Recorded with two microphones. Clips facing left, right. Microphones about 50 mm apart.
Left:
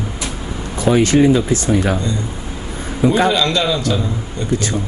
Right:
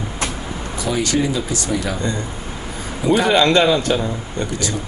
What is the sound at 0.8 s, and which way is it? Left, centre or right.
Speech, left.